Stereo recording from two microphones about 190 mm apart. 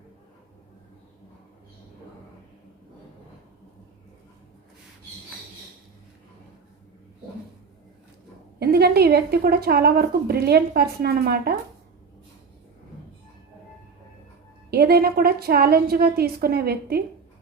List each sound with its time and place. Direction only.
8.5 s a woman's voice: 55° right (ahead or behind)
14.7 s a woman's voice: 55° right (ahead or behind)